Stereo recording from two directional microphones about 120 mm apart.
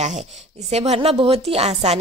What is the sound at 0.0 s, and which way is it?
A woman's voice, 75° right (ahead or behind).